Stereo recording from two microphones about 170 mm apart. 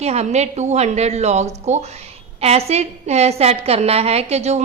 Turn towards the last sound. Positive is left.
turn(degrees=-40)  # may be behind; listen again after turning